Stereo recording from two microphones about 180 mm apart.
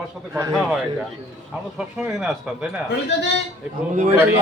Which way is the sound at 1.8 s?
5° right (ahead or behind).